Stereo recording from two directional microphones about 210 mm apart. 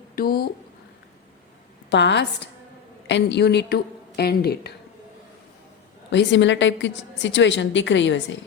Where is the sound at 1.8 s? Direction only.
55° left (ahead or behind).